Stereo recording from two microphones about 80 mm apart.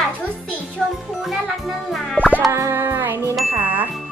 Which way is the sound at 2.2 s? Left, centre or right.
Left.